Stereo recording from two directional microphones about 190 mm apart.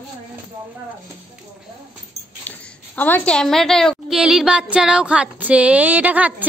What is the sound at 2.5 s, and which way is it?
A woman's voice, 10° left (ahead or behind).